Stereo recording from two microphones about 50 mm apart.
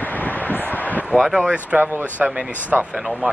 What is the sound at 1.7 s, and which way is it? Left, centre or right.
Speech, right.